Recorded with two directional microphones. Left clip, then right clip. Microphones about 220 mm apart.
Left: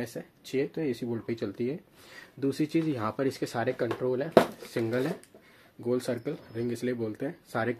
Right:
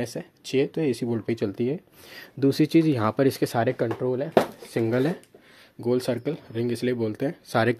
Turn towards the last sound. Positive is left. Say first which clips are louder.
# right 8 dB
turn(degrees=-45)  # may be behind; listen again after turning